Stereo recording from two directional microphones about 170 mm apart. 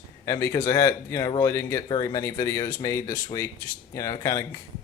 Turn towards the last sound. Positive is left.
turn(degrees=20)  # may be behind; listen again after turning